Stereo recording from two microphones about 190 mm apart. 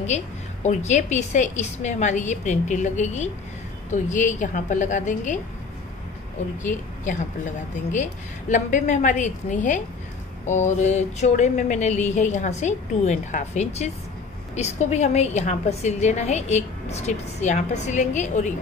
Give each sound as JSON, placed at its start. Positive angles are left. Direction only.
{"t": 0.0, "sound": "a woman's voice", "side_deg": 35}
{"t": 6.6, "sound": "a woman's voice", "side_deg": 40}